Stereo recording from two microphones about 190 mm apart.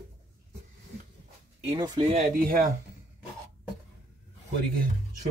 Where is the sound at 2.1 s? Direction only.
45° right (ahead or behind).